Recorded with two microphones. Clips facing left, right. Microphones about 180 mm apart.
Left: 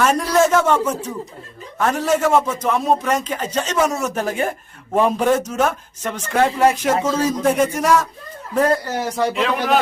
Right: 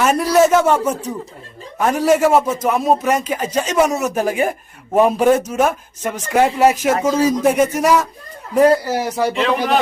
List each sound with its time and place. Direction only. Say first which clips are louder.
0.0 s a man's voice: right 3 dB; 10° right (ahead or behind)